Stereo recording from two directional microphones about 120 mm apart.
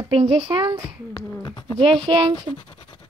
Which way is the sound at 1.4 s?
40° left (ahead or behind).